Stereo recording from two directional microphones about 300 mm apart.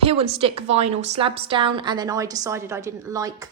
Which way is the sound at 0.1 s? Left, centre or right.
Centre.